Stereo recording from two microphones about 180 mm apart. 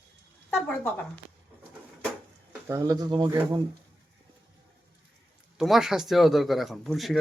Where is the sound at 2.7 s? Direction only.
15° right (ahead or behind).